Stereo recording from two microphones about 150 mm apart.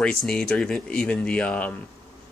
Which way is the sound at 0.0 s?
5° left (ahead or behind).